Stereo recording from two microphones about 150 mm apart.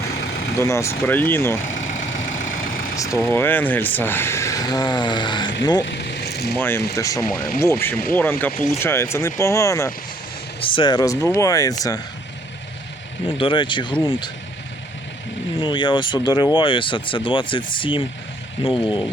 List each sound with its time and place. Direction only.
0.6 s speech: 20° left (ahead or behind)
1.7 s vehicle: 55° left (ahead or behind)
3.0 s speech: 20° left (ahead or behind)
6.0 s a sound: 90° left
6.6 s speech: 15° left (ahead or behind)
10.6 s speech: 35° left (ahead or behind)
13.3 s speech: 35° left (ahead or behind)
15.6 s speech: 30° left (ahead or behind)